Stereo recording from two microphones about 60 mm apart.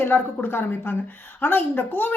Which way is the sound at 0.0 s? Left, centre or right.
Left.